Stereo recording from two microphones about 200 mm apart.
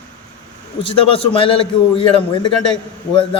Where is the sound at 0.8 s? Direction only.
25° left (ahead or behind).